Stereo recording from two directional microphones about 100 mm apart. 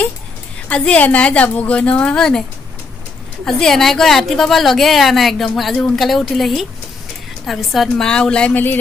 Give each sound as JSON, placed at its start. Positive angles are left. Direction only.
{"t": 0.7, "sound": "a woman's voice", "side_deg": 10}
{"t": 3.4, "sound": "a woman's voice", "side_deg": 5}